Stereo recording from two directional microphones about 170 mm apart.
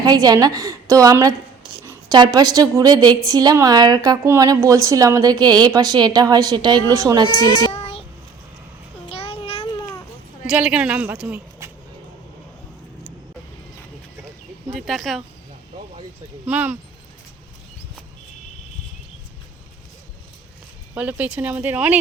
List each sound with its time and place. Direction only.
0.0 s a woman's voice: 25° right (ahead or behind)
7.3 s speech: 20° left (ahead or behind)
7.7 s child singing: 35° left (ahead or behind)
9.0 s babbling: 35° left (ahead or behind)
10.4 s a woman's voice: 5° right (ahead or behind)
14.7 s speech: centre (ahead or behind)
16.5 s speech: 10° right (ahead or behind)
20.9 s speech: 10° right (ahead or behind)